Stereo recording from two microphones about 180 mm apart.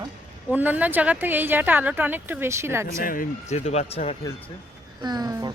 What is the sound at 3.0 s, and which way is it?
Speech, 50° left (ahead or behind).